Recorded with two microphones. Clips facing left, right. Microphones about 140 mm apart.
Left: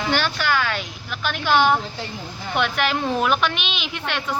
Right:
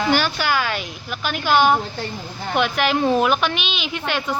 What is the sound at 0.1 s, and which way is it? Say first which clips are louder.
A woman's voice: left 1 dB; 10° right (ahead or behind).